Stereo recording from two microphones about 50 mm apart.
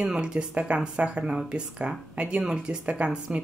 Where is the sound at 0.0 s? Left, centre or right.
Centre.